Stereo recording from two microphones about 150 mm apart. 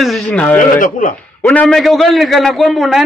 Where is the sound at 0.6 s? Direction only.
65° left (ahead or behind).